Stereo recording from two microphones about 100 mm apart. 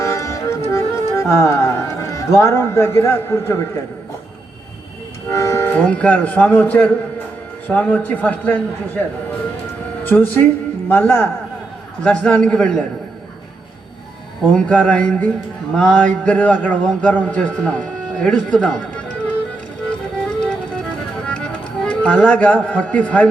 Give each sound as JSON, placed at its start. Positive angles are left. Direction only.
{"t": 0.0, "sound": "music", "side_deg": 30}
{"t": 5.3, "sound": "music", "side_deg": 30}
{"t": 5.7, "sound": "a man's voice", "side_deg": 10}
{"t": 10.1, "sound": "speech", "side_deg": 20}
{"t": 12.0, "sound": "a man's voice", "side_deg": 10}
{"t": 14.5, "sound": "a man's voice", "side_deg": 10}
{"t": 21.2, "sound": "speech", "side_deg": 10}